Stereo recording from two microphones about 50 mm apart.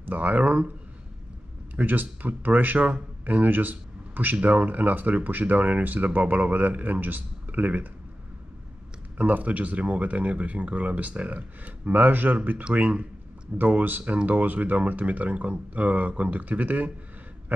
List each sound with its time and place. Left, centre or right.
0.0 s speech: right
1.8 s speech: right
9.2 s speech: right
17.5 s a sound: right